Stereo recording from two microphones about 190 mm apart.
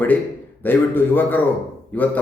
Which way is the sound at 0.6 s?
10° left (ahead or behind).